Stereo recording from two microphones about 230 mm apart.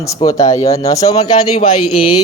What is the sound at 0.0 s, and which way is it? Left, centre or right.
Speech, centre.